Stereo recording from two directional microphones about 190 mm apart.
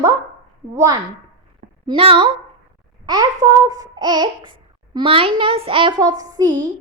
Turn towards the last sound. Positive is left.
turn(degrees=-20)  # may be behind; listen again after turning